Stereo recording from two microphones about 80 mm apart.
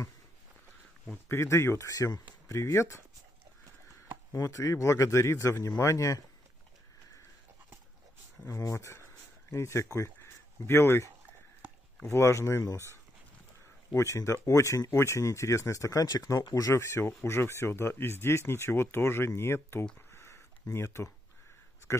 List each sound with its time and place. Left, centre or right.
1.3 s speech: left
1.9 s speech: left
4.3 s speech: left
8.5 s speech: left
12.1 s speech: left
13.9 s speech: left
20.1 s a sound: left